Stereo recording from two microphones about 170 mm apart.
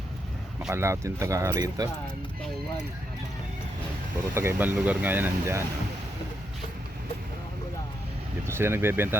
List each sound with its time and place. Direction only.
0.7 s speech: 15° right (ahead or behind)
4.4 s speech: 15° right (ahead or behind)
8.4 s speech: 15° right (ahead or behind)